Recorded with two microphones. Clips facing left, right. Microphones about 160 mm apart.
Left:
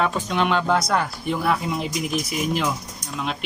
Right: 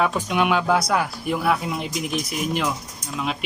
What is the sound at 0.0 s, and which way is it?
Speech, 10° right (ahead or behind).